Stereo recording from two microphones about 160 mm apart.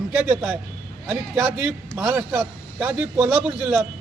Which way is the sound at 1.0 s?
10° right (ahead or behind).